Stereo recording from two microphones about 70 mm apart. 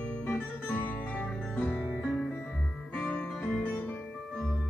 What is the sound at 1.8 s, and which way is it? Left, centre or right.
Music, centre.